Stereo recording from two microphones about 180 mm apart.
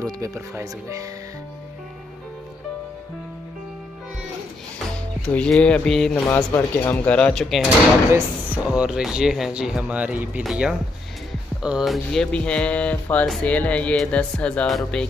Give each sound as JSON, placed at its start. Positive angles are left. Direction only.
{"t": 0.0, "sound": "speech", "side_deg": -20}
{"t": 5.2, "sound": "speech", "side_deg": 5}